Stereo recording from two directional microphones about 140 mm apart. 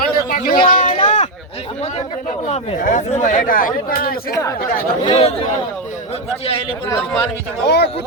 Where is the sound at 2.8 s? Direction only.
60° left (ahead or behind); by 4.1 s 85° left.